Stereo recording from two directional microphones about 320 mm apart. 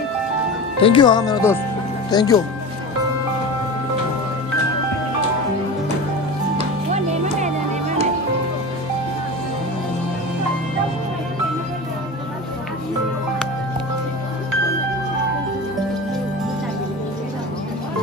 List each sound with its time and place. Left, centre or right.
0.7 s speech: centre
6.9 s music: right